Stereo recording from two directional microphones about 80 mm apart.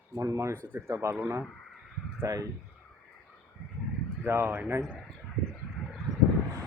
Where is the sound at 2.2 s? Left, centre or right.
Right.